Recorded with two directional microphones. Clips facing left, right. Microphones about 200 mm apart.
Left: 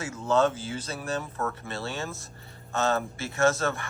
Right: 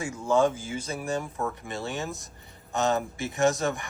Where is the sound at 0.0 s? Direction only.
10° right (ahead or behind).